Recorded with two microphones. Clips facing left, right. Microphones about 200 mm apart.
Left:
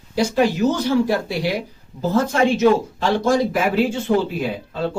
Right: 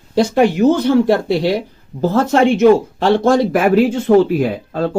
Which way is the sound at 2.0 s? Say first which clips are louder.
Right 5 dB; 60° right (ahead or behind).